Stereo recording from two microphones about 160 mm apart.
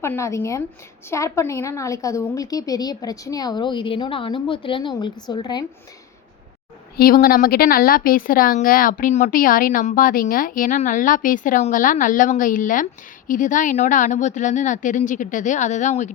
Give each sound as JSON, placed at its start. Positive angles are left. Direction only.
{"t": 0.0, "sound": "a woman's voice", "side_deg": 15}
{"t": 6.9, "sound": "a woman's voice", "side_deg": 65}